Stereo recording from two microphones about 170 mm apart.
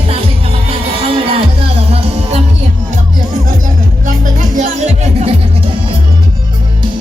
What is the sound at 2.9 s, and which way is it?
Music, 50° right (ahead or behind).